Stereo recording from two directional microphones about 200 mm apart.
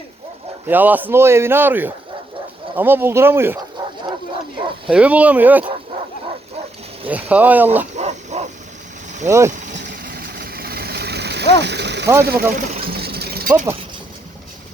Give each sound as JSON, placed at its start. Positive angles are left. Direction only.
{"t": 0.7, "sound": "a man's voice", "side_deg": -10}
{"t": 4.9, "sound": "a man's voice", "side_deg": -5}
{"t": 7.1, "sound": "a man's voice", "side_deg": -5}
{"t": 7.9, "sound": "dog", "side_deg": -35}
{"t": 9.2, "sound": "a man's voice", "side_deg": -15}
{"t": 9.5, "sound": "vehicle", "side_deg": -40}
{"t": 10.2, "sound": "vehicle", "side_deg": -50}
{"t": 12.2, "sound": "speech", "side_deg": -50}
{"t": 12.8, "sound": "mechanisms", "side_deg": -50}